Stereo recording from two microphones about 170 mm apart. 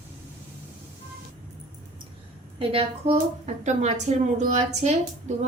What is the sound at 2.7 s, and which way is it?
A woman's voice, 35° right (ahead or behind).